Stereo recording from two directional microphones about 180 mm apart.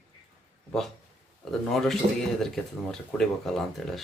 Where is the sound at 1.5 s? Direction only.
Centre (ahead or behind).